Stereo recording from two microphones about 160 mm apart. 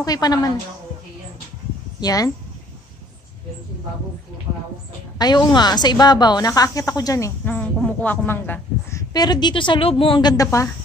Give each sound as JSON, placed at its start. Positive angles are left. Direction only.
{"t": 0.0, "sound": "speech", "side_deg": 25}
{"t": 2.0, "sound": "speech", "side_deg": 25}
{"t": 5.2, "sound": "speech", "side_deg": 30}
{"t": 9.1, "sound": "speech", "side_deg": 25}